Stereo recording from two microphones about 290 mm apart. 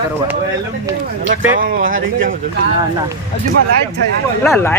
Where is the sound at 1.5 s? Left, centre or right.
Right.